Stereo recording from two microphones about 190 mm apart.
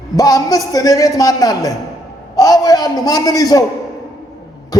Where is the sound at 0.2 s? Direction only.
20° left (ahead or behind).